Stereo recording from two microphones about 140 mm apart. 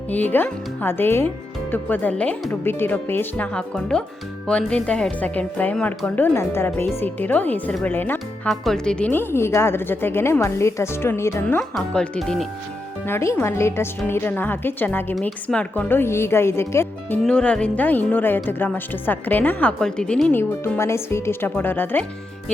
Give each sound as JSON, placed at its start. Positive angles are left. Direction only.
{"t": 0.1, "sound": "speech", "side_deg": 10}
{"t": 8.4, "sound": "speech", "side_deg": 0}
{"t": 11.7, "sound": "speech", "side_deg": 5}
{"t": 13.1, "sound": "speech", "side_deg": 15}
{"t": 17.2, "sound": "speech", "side_deg": 5}